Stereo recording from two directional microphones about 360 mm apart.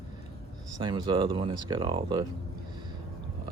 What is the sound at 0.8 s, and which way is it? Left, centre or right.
Speech, centre.